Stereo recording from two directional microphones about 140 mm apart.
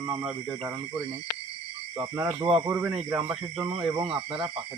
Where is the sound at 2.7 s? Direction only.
15° right (ahead or behind).